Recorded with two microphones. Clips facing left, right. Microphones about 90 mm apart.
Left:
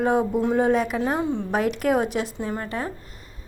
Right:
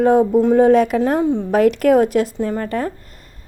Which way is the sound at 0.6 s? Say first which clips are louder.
Right 8 dB; 60° right (ahead or behind).